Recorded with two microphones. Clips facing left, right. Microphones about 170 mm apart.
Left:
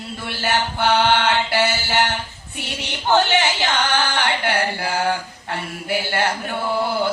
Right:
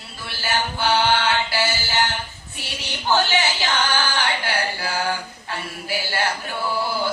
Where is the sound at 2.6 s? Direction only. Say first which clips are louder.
Left 3 dB; 60° left (ahead or behind).